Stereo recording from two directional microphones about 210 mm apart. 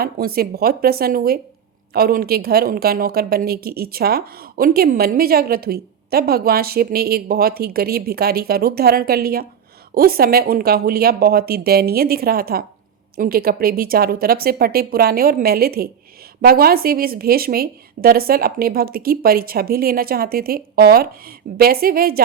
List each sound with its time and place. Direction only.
0.0 s a woman's voice: 45° right (ahead or behind)